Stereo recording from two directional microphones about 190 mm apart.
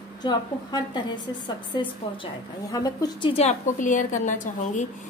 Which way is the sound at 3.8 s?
40° left (ahead or behind).